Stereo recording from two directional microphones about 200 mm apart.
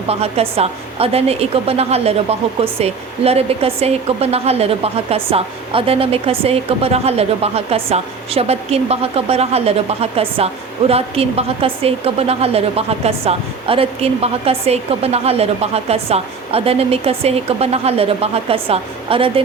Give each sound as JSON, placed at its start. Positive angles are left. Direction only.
{"t": 0.1, "sound": "a woman's voice", "side_deg": -30}